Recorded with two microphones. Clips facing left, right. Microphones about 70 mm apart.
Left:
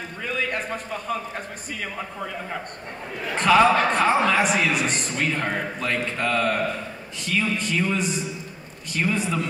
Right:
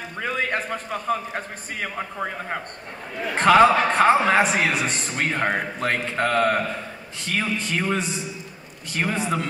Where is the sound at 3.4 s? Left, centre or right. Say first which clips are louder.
Right 2 dB; right.